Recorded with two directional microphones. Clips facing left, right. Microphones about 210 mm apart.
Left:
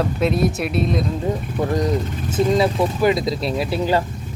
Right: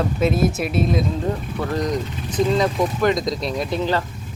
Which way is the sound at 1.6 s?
15° left (ahead or behind).